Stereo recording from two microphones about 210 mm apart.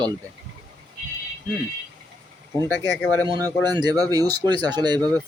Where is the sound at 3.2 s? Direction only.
20° right (ahead or behind).